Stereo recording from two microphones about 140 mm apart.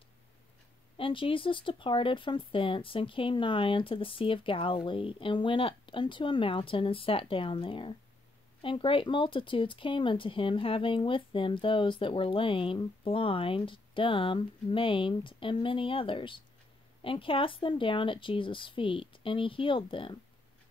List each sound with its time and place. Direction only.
0.9 s speech: 40° left (ahead or behind)